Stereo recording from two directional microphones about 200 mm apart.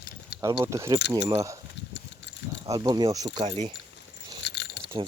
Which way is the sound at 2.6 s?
20° right (ahead or behind).